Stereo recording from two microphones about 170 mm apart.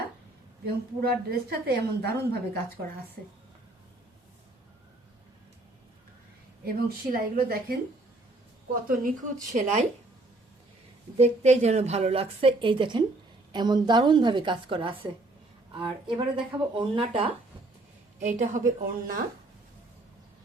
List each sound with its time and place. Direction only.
0.6 s a woman's voice: 65° right (ahead or behind)
6.7 s a woman's voice: 60° right (ahead or behind)
8.9 s speech: 50° right (ahead or behind)
11.2 s a woman's voice: 45° right (ahead or behind)
18.2 s speech: 50° right (ahead or behind)